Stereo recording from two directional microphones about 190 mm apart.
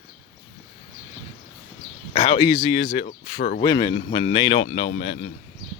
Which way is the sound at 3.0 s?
45° left (ahead or behind).